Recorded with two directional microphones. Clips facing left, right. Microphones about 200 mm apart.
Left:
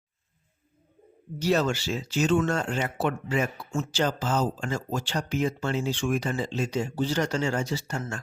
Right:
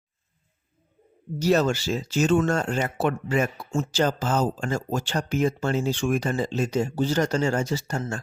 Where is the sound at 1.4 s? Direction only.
40° right (ahead or behind).